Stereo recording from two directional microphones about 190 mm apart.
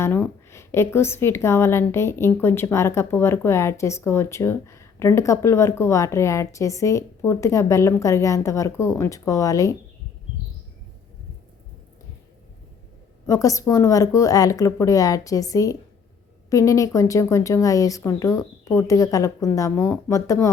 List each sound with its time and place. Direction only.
0.0 s a woman's voice: 10° left (ahead or behind)
13.2 s a woman's voice: 15° left (ahead or behind)